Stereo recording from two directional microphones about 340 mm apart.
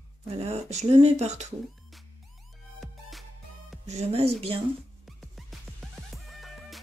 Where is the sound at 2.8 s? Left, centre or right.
Centre.